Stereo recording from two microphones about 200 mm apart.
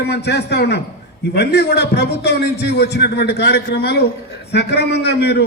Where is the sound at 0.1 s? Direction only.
55° left (ahead or behind).